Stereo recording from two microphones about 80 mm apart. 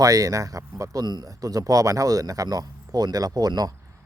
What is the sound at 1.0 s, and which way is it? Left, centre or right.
Speech, right.